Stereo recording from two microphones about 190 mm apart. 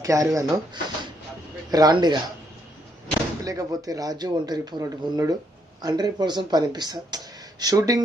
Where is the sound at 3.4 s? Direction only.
15° right (ahead or behind).